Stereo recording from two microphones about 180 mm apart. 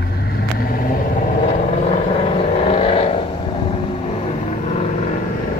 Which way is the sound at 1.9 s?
35° left (ahead or behind).